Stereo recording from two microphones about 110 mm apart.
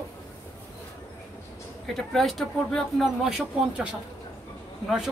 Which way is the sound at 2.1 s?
Centre (ahead or behind).